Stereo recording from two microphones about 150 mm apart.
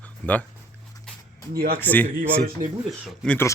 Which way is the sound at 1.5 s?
75° right (ahead or behind).